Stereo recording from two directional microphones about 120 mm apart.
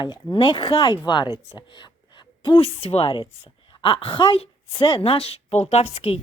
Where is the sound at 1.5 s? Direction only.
40° left (ahead or behind).